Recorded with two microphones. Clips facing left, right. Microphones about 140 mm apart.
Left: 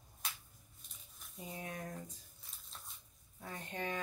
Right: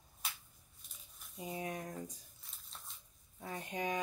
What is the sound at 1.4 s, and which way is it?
Speech, 20° right (ahead or behind).